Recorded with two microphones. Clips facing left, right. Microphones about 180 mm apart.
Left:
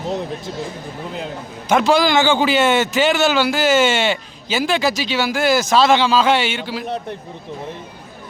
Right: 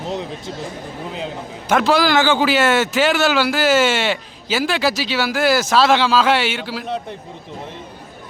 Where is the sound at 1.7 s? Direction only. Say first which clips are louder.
Left 1 dB; 5° right (ahead or behind).